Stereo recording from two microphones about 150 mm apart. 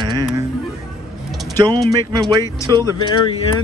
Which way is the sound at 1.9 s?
25° right (ahead or behind).